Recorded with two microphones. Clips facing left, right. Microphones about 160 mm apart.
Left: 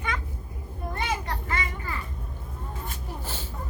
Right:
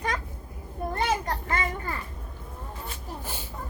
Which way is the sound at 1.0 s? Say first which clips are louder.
Right 3 dB; 40° right (ahead or behind).